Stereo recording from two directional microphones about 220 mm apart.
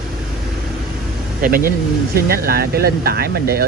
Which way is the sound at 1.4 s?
40° right (ahead or behind).